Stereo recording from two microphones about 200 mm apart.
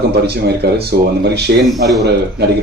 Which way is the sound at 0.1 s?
55° right (ahead or behind).